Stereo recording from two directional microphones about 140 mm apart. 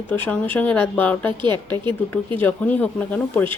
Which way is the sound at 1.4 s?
35° right (ahead or behind).